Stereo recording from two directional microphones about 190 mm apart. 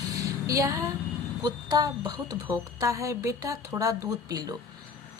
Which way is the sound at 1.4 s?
20° right (ahead or behind).